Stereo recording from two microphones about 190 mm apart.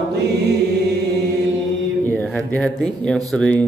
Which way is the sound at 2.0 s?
10° left (ahead or behind).